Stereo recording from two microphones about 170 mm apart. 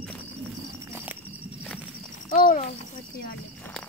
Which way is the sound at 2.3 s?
55° left (ahead or behind).